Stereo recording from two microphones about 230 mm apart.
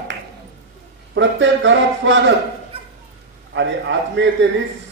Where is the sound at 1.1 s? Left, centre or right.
Right.